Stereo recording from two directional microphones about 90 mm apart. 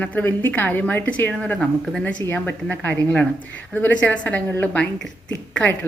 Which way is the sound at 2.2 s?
20° left (ahead or behind).